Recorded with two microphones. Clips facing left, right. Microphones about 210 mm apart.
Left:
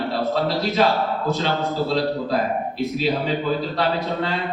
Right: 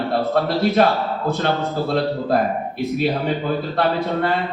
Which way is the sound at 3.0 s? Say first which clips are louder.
Right 2 dB; 55° right (ahead or behind).